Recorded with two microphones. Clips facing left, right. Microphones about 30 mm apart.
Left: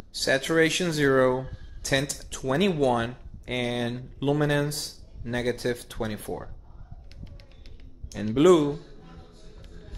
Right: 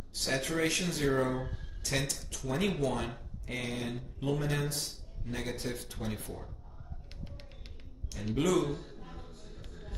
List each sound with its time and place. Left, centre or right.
0.1 s speech: left
8.4 s speech: left
8.7 s a sound: centre